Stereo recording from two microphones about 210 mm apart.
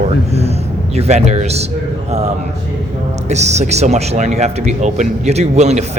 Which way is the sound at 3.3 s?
30° right (ahead or behind).